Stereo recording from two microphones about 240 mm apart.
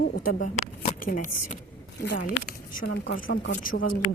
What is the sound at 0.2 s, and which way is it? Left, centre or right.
A woman's voice, left.